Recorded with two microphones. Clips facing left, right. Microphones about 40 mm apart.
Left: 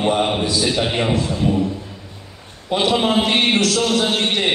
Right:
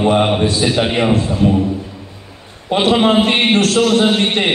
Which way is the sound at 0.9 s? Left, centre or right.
Right.